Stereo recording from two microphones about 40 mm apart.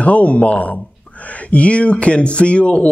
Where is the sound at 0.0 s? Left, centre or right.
Left.